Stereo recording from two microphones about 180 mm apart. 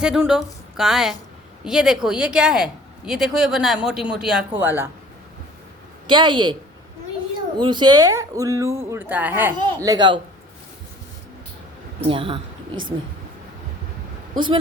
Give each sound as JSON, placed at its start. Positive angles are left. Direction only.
{"t": 0.0, "sound": "speech", "side_deg": -5}
{"t": 6.1, "sound": "speech", "side_deg": -25}
{"t": 7.6, "sound": "speech", "side_deg": -25}
{"t": 9.6, "sound": "speech", "side_deg": -20}
{"t": 12.0, "sound": "speech", "side_deg": -30}
{"t": 14.3, "sound": "speech", "side_deg": -25}